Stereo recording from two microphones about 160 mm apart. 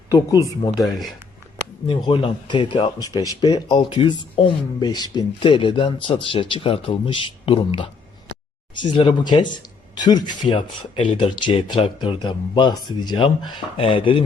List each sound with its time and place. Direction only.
0.1 s speech: 20° left (ahead or behind)
1.9 s speech: 30° left (ahead or behind)